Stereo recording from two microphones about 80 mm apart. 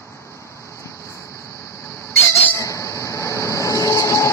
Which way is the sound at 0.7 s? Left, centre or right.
Left.